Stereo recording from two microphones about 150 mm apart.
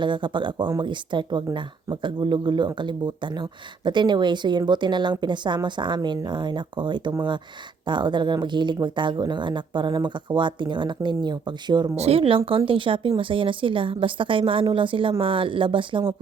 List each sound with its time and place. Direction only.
0.0 s speech: 30° right (ahead or behind)
11.9 s speech: 40° right (ahead or behind)